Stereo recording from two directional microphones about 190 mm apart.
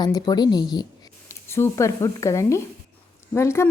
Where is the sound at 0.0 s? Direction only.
20° left (ahead or behind).